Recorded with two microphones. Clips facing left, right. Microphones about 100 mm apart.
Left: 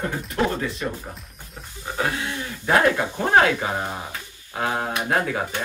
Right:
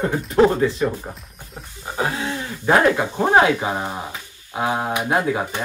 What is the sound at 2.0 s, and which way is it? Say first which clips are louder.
Speech: right 2 dB; 30° right (ahead or behind).